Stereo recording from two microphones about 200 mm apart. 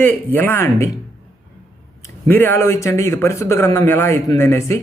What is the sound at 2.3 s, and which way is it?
Speech, 10° left (ahead or behind).